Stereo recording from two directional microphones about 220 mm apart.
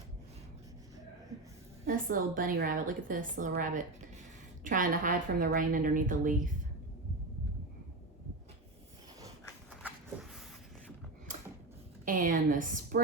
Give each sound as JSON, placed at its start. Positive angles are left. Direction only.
{"t": 1.9, "sound": "a woman's voice", "side_deg": -40}
{"t": 12.0, "sound": "a woman's voice", "side_deg": -40}